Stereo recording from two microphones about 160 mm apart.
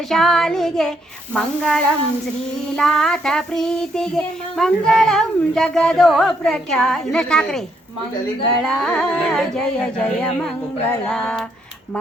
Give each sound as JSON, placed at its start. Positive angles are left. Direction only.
{"t": 0.1, "sound": "child singing", "side_deg": 0}